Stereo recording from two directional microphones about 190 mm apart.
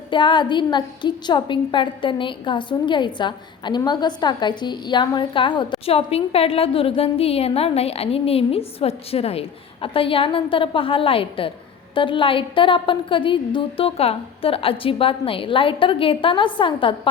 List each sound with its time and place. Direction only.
0.1 s a woman's voice: 25° left (ahead or behind)